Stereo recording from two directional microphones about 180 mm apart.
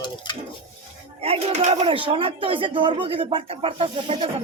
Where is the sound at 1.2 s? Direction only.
35° right (ahead or behind).